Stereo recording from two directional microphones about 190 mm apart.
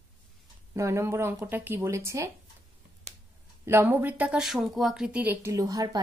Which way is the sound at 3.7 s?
10° right (ahead or behind).